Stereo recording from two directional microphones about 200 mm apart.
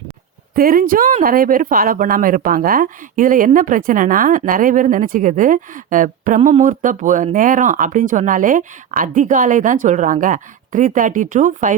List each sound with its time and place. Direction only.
0.5 s a woman's voice: 45° right (ahead or behind)